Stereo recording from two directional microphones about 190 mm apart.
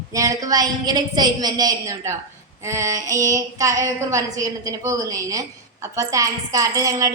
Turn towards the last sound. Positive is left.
turn(degrees=-20)  # may be behind; listen again after turning